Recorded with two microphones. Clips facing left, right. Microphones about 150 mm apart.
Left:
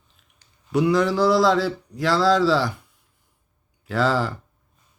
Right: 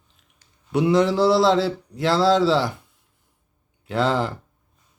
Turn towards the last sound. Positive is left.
turn(degrees=-20)  # may be behind; listen again after turning